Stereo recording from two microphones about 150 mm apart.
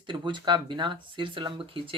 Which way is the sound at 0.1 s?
30° right (ahead or behind).